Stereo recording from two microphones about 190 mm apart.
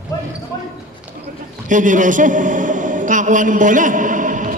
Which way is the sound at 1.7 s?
40° right (ahead or behind).